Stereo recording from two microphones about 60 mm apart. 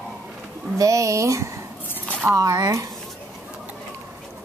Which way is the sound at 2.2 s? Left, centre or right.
Right.